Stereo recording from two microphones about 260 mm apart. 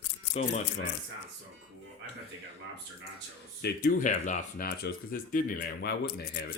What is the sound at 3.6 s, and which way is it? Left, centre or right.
Speech, left.